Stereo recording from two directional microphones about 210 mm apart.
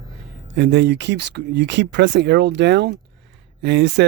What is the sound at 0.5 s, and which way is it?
Speech, 55° right (ahead or behind).